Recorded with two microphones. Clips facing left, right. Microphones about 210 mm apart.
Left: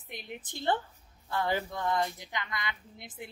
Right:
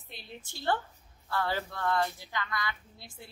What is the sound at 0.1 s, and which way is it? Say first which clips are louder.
A woman's voice: left 4 dB; 15° left (ahead or behind).